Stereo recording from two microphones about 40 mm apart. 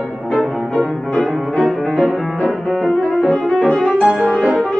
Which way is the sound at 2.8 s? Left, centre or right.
Centre.